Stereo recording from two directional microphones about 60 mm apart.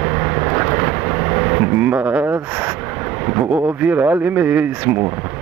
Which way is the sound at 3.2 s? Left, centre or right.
Right.